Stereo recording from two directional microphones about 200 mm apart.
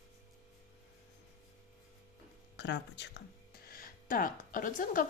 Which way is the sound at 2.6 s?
60° left (ahead or behind).